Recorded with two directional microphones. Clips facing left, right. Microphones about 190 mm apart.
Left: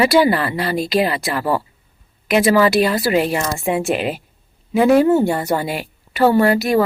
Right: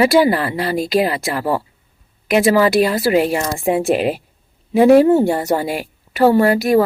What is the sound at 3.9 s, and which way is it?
Speech, 35° right (ahead or behind).